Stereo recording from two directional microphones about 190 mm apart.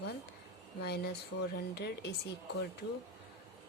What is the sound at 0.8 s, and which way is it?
A woman's voice, 60° left (ahead or behind).